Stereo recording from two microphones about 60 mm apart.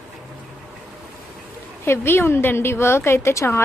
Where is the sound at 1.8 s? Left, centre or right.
Left.